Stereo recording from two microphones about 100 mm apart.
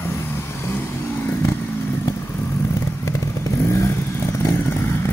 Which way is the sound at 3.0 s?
30° left (ahead or behind).